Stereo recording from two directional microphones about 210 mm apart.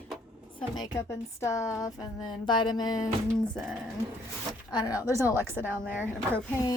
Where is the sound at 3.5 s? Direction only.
Centre (ahead or behind).